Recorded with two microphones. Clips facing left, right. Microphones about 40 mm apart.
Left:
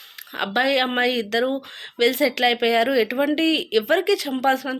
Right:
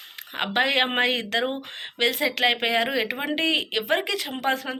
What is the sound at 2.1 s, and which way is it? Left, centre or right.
Speech, centre.